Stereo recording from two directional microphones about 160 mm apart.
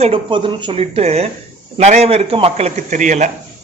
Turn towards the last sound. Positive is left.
turn(degrees=-50)  # may be behind; listen again after turning